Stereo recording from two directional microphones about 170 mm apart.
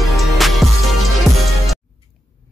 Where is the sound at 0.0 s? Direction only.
Centre (ahead or behind).